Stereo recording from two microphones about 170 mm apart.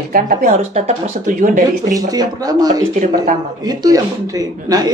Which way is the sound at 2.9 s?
55° right (ahead or behind).